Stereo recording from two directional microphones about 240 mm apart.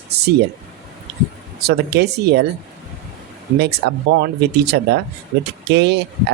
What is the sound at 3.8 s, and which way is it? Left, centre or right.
Speech, right.